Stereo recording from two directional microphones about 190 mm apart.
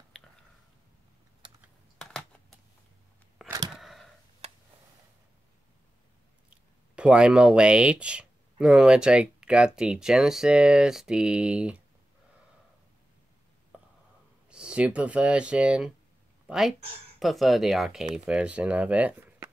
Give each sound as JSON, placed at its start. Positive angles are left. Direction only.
{"t": 1.4, "sound": "computer keyboard", "side_deg": -25}
{"t": 3.7, "sound": "a sound", "side_deg": 0}
{"t": 6.5, "sound": "speech", "side_deg": -5}
{"t": 13.7, "sound": "whispering", "side_deg": -5}
{"t": 14.5, "sound": "speech", "side_deg": -5}